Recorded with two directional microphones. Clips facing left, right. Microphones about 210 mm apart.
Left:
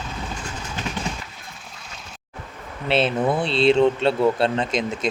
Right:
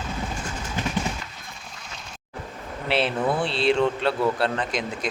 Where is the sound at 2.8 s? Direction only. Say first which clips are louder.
Left 3 dB; 25° left (ahead or behind).